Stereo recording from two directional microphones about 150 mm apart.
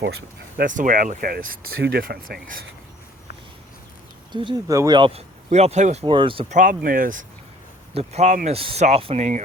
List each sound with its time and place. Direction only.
0.0 s speech: 90° right
4.3 s speech: 30° right (ahead or behind)
4.7 s speech: 20° right (ahead or behind)
4.9 s speech: 35° right (ahead or behind)
5.5 s speech: 50° right (ahead or behind)
6.1 s speech: 35° right (ahead or behind)
6.5 s speech: 60° right (ahead or behind)
7.9 s speech: 50° right (ahead or behind)
8.5 s speech: 40° right (ahead or behind)